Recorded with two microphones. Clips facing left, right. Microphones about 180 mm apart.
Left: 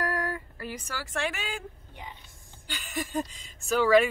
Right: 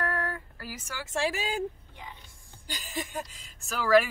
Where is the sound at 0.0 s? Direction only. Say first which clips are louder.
Left 2 dB; 10° left (ahead or behind).